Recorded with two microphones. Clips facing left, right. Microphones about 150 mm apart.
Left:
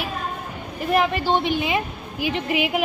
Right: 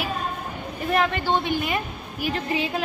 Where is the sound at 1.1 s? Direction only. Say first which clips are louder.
Left 2 dB; 20° left (ahead or behind).